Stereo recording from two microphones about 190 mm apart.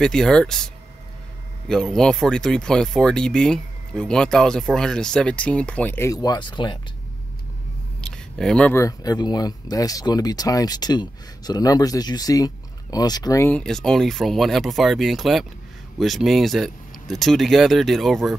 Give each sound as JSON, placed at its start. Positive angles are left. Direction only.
{"t": 0.0, "sound": "speech", "side_deg": 5}
{"t": 1.7, "sound": "speech", "side_deg": 5}
{"t": 8.0, "sound": "speech", "side_deg": 5}